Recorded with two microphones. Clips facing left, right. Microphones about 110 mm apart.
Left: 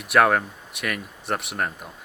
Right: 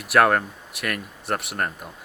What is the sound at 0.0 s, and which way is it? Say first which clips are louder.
Speech: even; centre (ahead or behind).